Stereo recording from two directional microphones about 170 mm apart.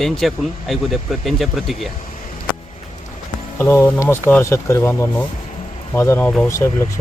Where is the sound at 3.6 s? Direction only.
15° left (ahead or behind).